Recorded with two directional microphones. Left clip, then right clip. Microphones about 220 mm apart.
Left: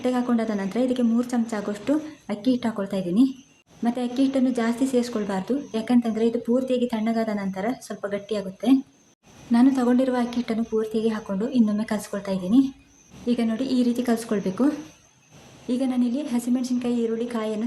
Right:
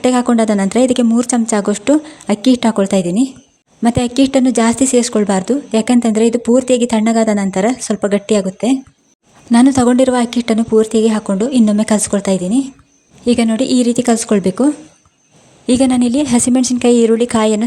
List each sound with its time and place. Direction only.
0.0 s a woman's voice: 40° right (ahead or behind)
9.5 s a woman's voice: 40° right (ahead or behind)
12.5 s speech: 20° right (ahead or behind)
13.2 s a woman's voice: 40° right (ahead or behind)